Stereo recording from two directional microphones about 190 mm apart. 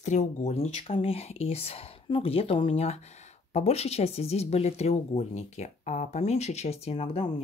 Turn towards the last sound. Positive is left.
turn(degrees=30)  # may be behind; listen again after turning